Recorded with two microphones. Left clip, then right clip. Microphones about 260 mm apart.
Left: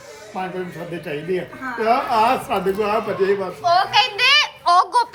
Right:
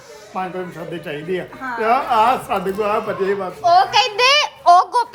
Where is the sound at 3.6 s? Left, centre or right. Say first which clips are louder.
Right 3 dB; right.